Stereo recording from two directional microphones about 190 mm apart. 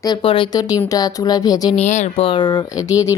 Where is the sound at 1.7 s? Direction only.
35° left (ahead or behind); by 3.1 s 15° left (ahead or behind).